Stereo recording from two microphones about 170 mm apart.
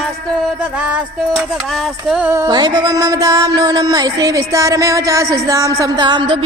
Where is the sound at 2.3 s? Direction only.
20° right (ahead or behind).